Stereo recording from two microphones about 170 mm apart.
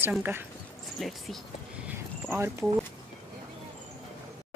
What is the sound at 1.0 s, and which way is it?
Speech, centre (ahead or behind).